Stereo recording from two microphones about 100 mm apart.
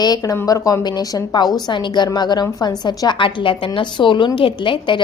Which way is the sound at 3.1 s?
55° left (ahead or behind).